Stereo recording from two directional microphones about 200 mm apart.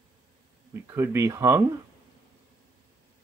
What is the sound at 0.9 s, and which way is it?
Speech, 15° right (ahead or behind).